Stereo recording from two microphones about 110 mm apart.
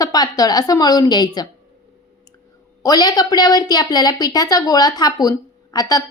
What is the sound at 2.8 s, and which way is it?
A woman's voice, 35° left (ahead or behind).